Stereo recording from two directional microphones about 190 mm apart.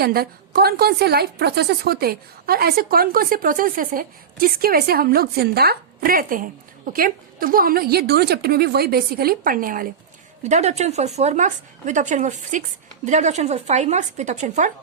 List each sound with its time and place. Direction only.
0.0 s a woman's voice: 55° right (ahead or behind)
10.4 s a woman's voice: 35° right (ahead or behind)